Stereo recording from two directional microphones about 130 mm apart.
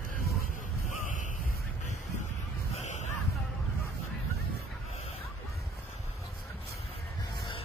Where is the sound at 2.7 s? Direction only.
60° left (ahead or behind).